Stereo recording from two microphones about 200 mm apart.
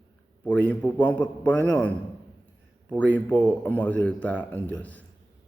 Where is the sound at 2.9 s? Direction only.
10° left (ahead or behind).